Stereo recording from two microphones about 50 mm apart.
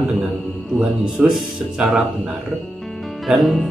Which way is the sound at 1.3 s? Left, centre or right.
Centre.